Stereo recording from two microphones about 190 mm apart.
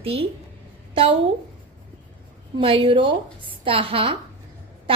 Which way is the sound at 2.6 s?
30° right (ahead or behind).